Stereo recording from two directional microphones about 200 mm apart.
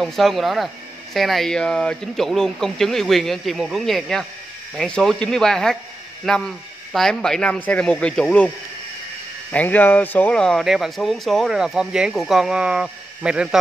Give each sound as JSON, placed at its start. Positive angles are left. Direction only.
{"t": 0.0, "sound": "speech", "side_deg": 0}
{"t": 9.5, "sound": "speech", "side_deg": 10}